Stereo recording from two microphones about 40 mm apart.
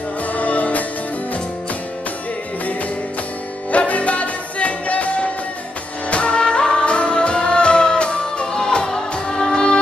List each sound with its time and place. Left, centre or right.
0.3 s music: left
3.7 s music: left; by 9.8 s centre